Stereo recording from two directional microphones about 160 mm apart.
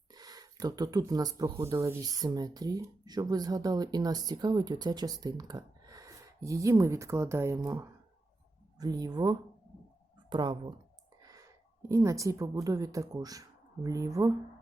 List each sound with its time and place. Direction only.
0.1 s a woman's voice: 25° right (ahead or behind)